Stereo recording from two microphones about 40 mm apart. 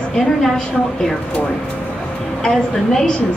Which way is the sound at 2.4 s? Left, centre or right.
Centre.